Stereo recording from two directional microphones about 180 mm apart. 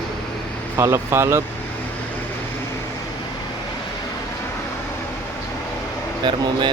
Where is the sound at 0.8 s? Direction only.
15° right (ahead or behind).